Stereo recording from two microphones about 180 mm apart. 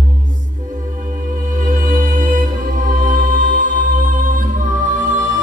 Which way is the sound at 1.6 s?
45° right (ahead or behind).